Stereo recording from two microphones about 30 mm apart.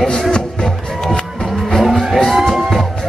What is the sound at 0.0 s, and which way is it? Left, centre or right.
Music, left.